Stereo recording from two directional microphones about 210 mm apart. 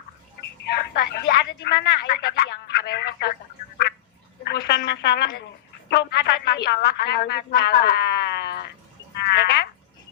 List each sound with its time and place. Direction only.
0.7 s speech: 50° left (ahead or behind)
4.4 s speech: 50° left (ahead or behind)
9.3 s frog: 50° left (ahead or behind)